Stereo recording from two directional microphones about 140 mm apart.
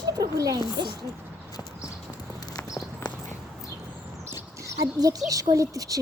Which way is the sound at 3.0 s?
30° left (ahead or behind).